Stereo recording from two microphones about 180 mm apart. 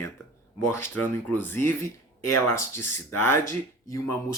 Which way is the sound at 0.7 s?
10° left (ahead or behind).